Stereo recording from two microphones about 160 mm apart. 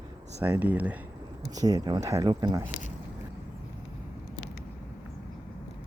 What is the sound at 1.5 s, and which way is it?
Speech, 25° right (ahead or behind).